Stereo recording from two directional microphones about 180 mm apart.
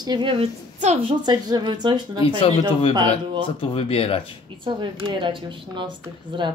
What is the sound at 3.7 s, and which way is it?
Speech, 30° left (ahead or behind).